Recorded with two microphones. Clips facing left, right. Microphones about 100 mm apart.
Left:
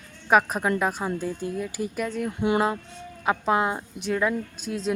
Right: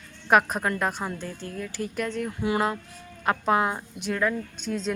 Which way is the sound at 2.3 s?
20° left (ahead or behind).